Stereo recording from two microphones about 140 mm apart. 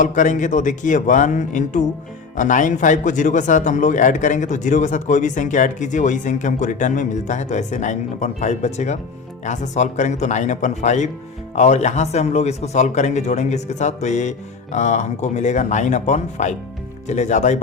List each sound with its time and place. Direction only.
0.0 s speech: 65° left (ahead or behind)